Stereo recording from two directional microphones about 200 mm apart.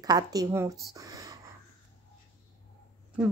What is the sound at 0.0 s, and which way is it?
A woman's voice, 20° right (ahead or behind).